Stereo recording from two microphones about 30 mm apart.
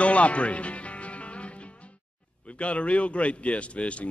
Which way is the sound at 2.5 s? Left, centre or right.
Left.